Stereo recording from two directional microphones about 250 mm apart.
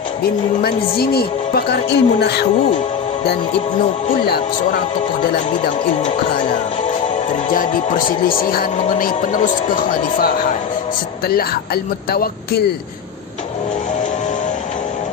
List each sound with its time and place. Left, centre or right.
0.6 s speech: left
5.6 s speech: left
7.5 s speech: left
11.3 s speech: left